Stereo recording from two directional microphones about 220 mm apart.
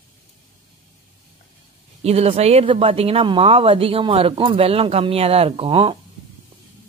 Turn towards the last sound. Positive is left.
turn(degrees=-25)  # may be behind; listen again after turning